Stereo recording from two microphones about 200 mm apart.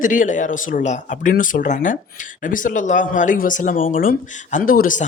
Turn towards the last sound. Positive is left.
turn(degrees=45)  # may be behind; listen again after turning